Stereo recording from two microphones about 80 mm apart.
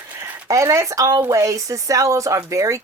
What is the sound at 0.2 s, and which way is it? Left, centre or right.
Speech, right.